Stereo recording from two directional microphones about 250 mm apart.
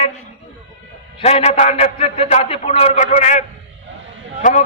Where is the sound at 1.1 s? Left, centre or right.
Left.